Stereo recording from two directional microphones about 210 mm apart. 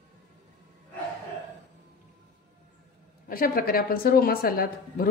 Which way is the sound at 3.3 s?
45° left (ahead or behind).